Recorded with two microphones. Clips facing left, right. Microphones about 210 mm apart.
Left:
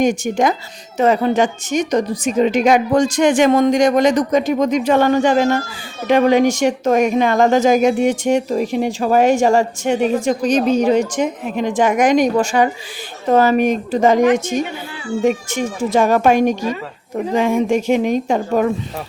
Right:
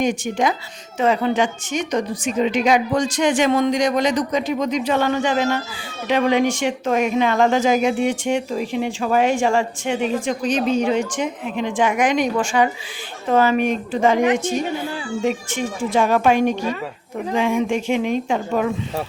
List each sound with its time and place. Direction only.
0.0 s speech: 45° left (ahead or behind)